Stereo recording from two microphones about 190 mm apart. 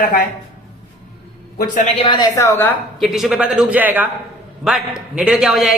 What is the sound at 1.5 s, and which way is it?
Speech, 40° left (ahead or behind).